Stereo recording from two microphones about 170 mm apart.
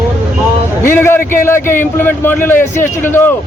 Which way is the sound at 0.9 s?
15° left (ahead or behind).